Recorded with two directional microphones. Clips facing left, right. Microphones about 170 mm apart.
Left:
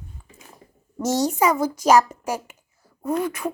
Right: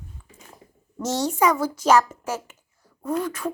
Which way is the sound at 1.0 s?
10° left (ahead or behind).